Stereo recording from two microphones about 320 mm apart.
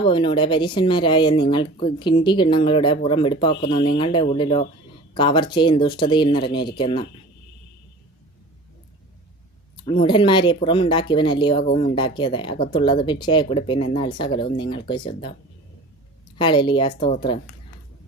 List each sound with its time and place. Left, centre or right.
0.0 s speech: centre
9.8 s speech: centre
16.4 s speech: centre